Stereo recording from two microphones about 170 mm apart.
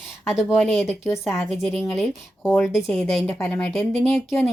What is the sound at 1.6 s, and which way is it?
Speech, centre (ahead or behind).